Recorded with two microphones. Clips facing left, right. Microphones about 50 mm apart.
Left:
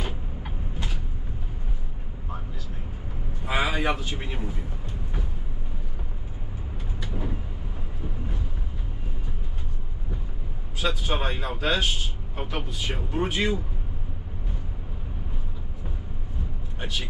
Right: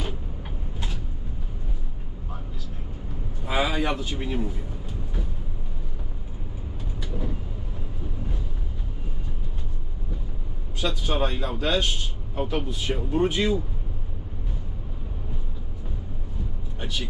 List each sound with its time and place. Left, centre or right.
3.4 s a man's voice: centre
7.0 s vehicle: centre
10.8 s a man's voice: centre
16.8 s speech: centre